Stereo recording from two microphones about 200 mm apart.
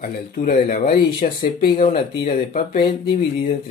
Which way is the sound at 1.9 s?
40° left (ahead or behind).